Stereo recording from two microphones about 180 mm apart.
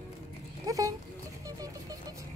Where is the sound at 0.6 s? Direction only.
20° right (ahead or behind).